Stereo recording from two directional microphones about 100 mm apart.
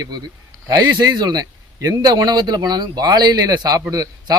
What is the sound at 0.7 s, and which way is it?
A man's voice, 45° right (ahead or behind).